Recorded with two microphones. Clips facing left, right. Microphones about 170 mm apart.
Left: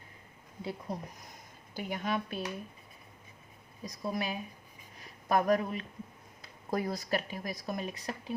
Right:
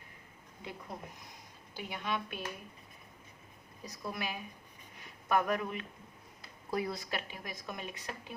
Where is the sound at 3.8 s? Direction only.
35° left (ahead or behind).